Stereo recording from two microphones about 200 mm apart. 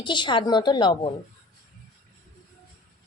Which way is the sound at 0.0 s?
25° left (ahead or behind).